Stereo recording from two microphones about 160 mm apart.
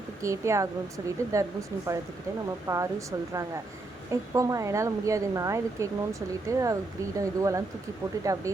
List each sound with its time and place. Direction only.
0.2 s a woman's voice: 20° right (ahead or behind)
2.6 s a woman's voice: 20° right (ahead or behind)